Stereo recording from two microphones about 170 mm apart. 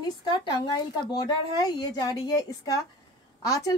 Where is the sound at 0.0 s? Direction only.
25° left (ahead or behind).